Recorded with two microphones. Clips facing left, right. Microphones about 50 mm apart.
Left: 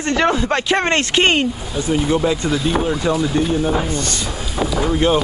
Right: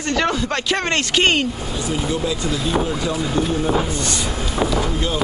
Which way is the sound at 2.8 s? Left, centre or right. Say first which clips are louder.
Left 3 dB; centre.